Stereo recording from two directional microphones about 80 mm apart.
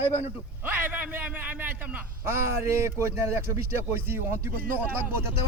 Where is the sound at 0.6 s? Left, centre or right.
Right.